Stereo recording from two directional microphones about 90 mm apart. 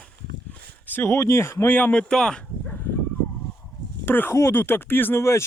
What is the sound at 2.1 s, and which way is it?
Speech, 10° left (ahead or behind).